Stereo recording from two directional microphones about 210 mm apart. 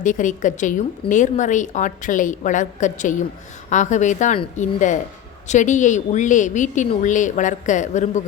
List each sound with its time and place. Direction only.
0.0 s a woman's voice: 35° left (ahead or behind)